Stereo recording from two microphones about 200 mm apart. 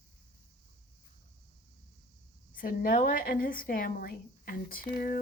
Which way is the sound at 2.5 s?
45° left (ahead or behind).